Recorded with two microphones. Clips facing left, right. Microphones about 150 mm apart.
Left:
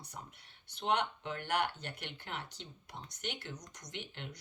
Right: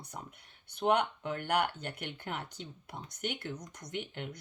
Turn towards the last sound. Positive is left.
turn(degrees=-50)  # may be behind; listen again after turning